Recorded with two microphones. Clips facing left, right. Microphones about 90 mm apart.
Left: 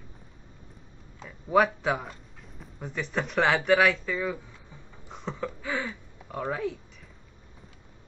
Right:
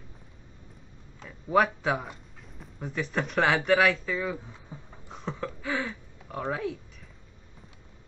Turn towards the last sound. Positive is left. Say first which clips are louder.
# left 1 dB
turn(degrees=0)  # may be behind; listen again after turning